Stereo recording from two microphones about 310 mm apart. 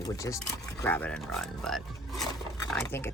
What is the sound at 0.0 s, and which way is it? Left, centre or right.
Speech, centre.